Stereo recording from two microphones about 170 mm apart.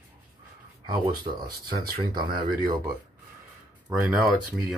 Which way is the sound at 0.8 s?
25° right (ahead or behind).